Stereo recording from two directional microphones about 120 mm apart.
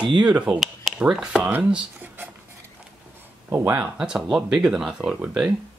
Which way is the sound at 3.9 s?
5° right (ahead or behind).